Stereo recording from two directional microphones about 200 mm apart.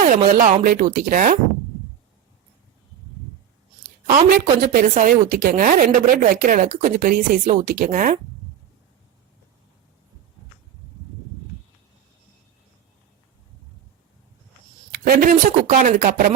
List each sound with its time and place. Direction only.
0.0 s speech: 40° right (ahead or behind)
4.1 s a woman's voice: 45° right (ahead or behind)
15.0 s a woman's voice: 45° right (ahead or behind)